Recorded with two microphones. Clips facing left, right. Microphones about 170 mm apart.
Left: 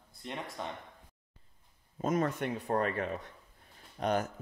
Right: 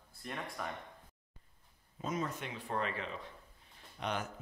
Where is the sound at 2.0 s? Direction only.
55° left (ahead or behind).